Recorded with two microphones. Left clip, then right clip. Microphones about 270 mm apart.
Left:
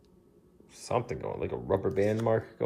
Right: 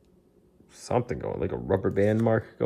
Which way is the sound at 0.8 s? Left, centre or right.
Right.